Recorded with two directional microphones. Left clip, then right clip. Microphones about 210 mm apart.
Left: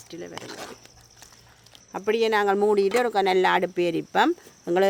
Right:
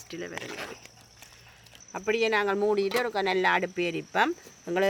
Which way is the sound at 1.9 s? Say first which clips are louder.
Left 4 dB; 50° left (ahead or behind).